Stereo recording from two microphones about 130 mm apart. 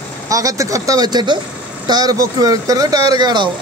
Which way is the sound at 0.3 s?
25° right (ahead or behind).